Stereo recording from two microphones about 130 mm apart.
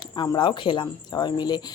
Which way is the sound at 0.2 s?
35° left (ahead or behind).